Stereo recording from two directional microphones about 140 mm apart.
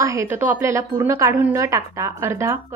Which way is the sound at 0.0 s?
20° right (ahead or behind).